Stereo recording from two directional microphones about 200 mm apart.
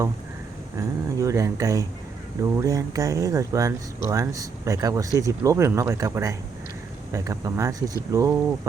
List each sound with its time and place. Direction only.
0.8 s speech: 15° right (ahead or behind)